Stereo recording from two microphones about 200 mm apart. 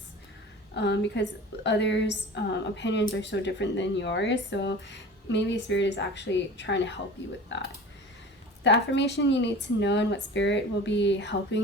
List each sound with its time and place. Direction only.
0.7 s a woman's voice: 60° left (ahead or behind)
8.9 s a woman's voice: 60° left (ahead or behind)